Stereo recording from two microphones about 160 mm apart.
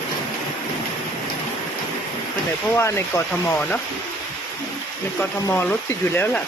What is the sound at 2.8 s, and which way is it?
Speech, 15° left (ahead or behind).